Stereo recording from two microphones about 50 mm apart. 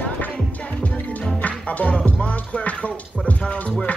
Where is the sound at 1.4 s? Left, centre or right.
Left.